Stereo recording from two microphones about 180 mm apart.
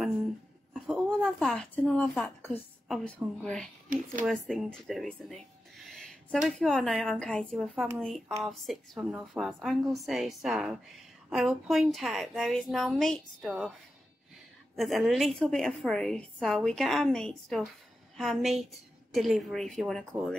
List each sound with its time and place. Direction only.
0.7 s a woman's voice: centre (ahead or behind)
3.9 s speech: 50° right (ahead or behind)
4.3 s a woman's voice: 5° left (ahead or behind)
5.9 s a sound: 5° left (ahead or behind)
6.6 s a woman's voice: centre (ahead or behind)
14.8 s a woman's voice: centre (ahead or behind)